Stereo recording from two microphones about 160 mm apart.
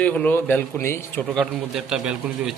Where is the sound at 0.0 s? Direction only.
10° left (ahead or behind).